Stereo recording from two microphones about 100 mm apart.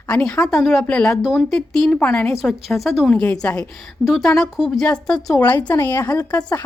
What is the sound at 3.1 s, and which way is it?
Speech, 15° left (ahead or behind).